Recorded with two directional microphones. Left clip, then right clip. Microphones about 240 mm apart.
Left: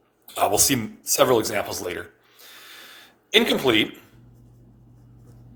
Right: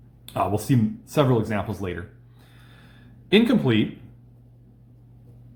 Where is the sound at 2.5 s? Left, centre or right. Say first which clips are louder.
Left 11 dB; left.